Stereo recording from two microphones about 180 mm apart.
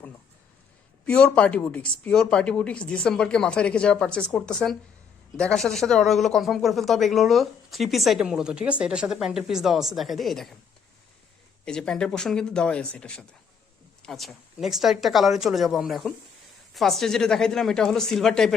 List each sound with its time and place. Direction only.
1.0 s speech: 5° left (ahead or behind)
11.6 s speech: 5° left (ahead or behind)